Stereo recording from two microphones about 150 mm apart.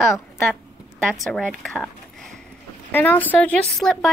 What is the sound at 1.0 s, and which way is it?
A woman's voice, centre (ahead or behind).